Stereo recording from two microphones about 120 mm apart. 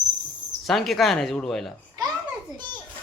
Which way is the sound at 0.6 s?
Centre (ahead or behind).